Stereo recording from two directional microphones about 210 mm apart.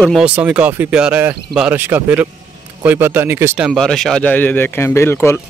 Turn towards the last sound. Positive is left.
turn(degrees=10)  # may be behind; listen again after turning